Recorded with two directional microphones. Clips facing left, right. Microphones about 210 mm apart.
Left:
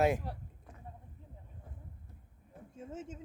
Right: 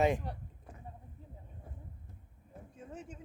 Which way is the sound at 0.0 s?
5° left (ahead or behind).